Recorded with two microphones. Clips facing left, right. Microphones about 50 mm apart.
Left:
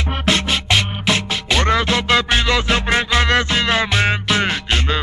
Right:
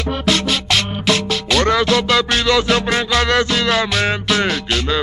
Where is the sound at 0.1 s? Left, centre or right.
Left.